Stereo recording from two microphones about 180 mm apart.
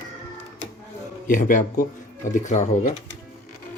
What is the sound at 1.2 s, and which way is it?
Speech, 45° left (ahead or behind).